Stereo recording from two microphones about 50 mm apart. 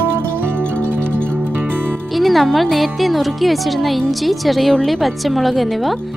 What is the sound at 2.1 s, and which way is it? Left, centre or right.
Speech, centre.